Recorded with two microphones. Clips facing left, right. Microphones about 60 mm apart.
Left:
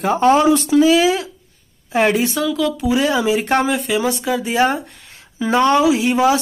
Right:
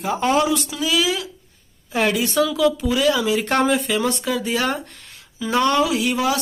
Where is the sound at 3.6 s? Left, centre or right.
Centre.